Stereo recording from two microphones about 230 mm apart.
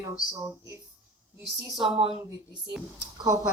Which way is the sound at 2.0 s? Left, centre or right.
Right.